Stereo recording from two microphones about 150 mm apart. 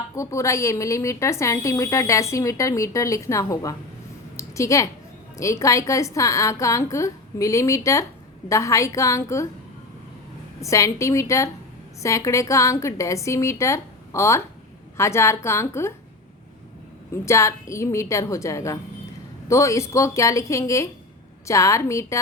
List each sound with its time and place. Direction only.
0.2 s a woman's voice: 20° left (ahead or behind)
4.4 s a sound: 20° left (ahead or behind)
5.4 s a woman's voice: 20° left (ahead or behind)
10.6 s a woman's voice: 20° left (ahead or behind)
17.2 s a woman's voice: 20° left (ahead or behind)